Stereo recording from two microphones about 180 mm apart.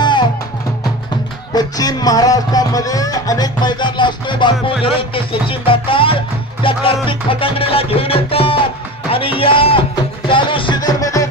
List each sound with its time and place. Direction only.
0.0 s music: 25° left (ahead or behind)
1.5 s music: 20° left (ahead or behind)